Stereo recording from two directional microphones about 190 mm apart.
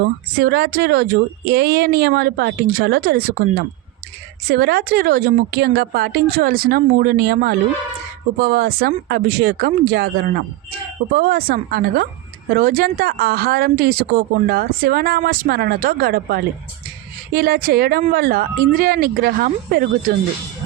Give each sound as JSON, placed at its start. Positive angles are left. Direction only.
{"t": 0.0, "sound": "speech", "side_deg": -55}
{"t": 4.4, "sound": "a woman's voice", "side_deg": -55}